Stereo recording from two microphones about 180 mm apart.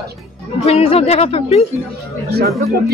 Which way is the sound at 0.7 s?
35° left (ahead or behind).